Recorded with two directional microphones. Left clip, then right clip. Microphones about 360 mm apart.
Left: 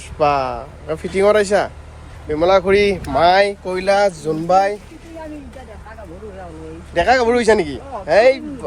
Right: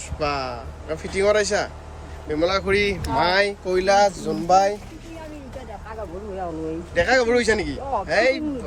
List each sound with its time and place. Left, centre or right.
0.2 s speech: centre
6.9 s speech: centre